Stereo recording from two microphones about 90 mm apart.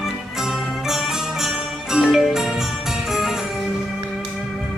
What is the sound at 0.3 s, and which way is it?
Jingle bell, 5° right (ahead or behind).